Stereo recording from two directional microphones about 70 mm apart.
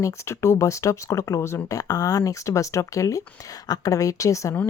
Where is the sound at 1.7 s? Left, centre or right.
Left.